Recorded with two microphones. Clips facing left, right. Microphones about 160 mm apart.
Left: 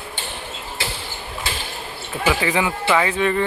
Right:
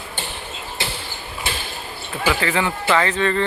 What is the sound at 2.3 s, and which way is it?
Speech, 15° left (ahead or behind).